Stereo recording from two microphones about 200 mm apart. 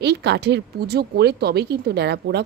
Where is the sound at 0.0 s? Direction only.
55° right (ahead or behind).